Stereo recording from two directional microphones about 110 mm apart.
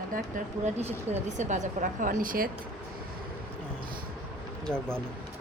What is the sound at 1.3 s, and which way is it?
Speech, 90° right.